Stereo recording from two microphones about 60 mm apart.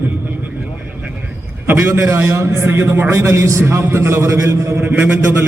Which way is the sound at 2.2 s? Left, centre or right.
Right.